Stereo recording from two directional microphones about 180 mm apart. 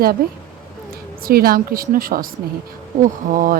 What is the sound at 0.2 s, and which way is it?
Speech, 55° right (ahead or behind).